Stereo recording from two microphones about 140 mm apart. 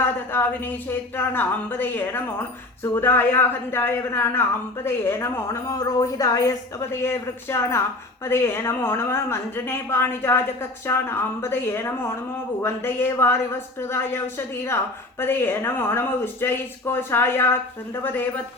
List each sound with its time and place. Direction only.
0.3 s a woman's voice: 15° left (ahead or behind)